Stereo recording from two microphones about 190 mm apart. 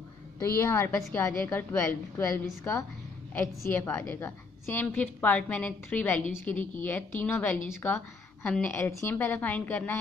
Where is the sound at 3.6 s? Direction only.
10° left (ahead or behind).